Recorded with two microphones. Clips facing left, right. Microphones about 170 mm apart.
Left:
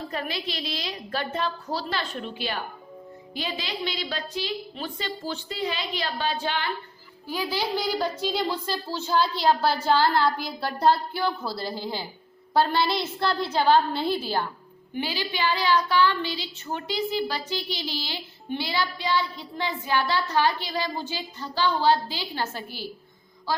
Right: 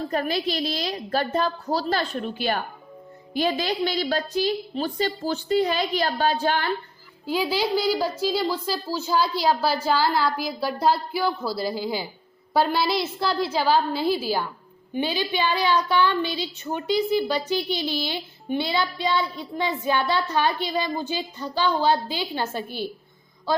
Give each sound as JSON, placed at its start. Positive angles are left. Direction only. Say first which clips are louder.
{"t": 0.1, "sound": "a woman's voice", "louder": "right 7 dB", "side_deg": -45}
{"t": 7.3, "sound": "a woman's voice", "louder": "right 4 dB", "side_deg": -10}
{"t": 15.0, "sound": "a woman's voice", "louder": "right 3 dB", "side_deg": -20}